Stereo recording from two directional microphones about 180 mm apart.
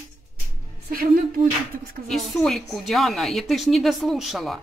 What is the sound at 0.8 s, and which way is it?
Speech, 55° right (ahead or behind).